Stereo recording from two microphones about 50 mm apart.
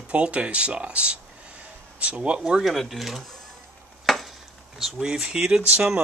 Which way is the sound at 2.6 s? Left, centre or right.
Centre.